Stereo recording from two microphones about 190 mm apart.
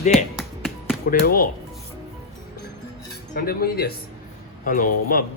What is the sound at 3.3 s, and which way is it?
Speech, 50° left (ahead or behind).